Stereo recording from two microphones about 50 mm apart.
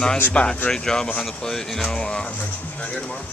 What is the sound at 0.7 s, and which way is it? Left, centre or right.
Speech, centre.